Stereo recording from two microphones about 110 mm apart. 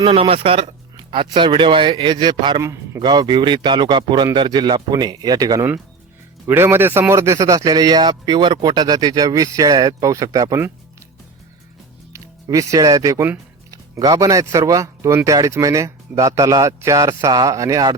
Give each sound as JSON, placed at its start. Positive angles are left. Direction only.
{"t": 0.0, "sound": "speech", "side_deg": -60}
{"t": 2.6, "sound": "a man's voice", "side_deg": -25}
{"t": 3.0, "sound": "speech", "side_deg": -40}
{"t": 6.5, "sound": "speech", "side_deg": -20}
{"t": 12.1, "sound": "speech", "side_deg": -30}